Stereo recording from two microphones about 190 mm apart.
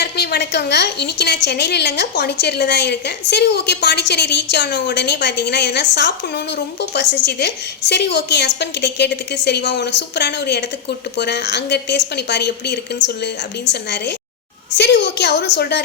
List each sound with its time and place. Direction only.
0.0 s a woman's voice: 60° left (ahead or behind)